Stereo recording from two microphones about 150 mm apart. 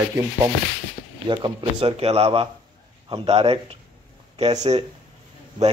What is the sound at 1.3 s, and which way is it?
Speech, 35° right (ahead or behind).